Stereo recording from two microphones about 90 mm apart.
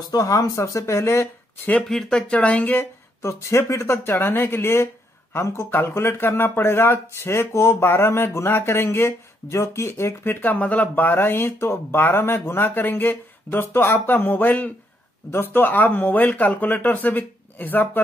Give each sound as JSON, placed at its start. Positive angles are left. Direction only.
{"t": 0.1, "sound": "speech", "side_deg": 40}
{"t": 1.9, "sound": "speech", "side_deg": 5}